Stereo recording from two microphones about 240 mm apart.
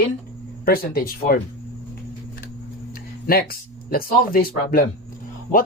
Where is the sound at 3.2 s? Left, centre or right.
Left.